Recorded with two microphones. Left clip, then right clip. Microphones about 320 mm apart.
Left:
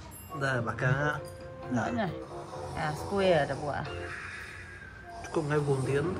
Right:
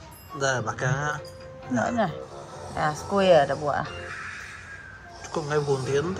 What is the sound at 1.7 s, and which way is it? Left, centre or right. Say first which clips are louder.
Speech: right 7 dB; right.